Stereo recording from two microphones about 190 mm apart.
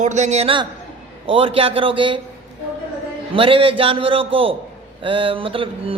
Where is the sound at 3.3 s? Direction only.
30° right (ahead or behind).